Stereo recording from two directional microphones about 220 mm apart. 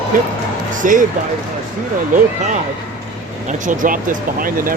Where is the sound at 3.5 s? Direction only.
35° right (ahead or behind).